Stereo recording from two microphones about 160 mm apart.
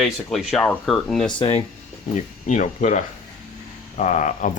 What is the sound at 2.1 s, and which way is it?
Speech, 50° left (ahead or behind).